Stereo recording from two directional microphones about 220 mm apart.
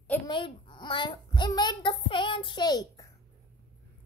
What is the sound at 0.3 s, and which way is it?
A child's voice, 20° left (ahead or behind).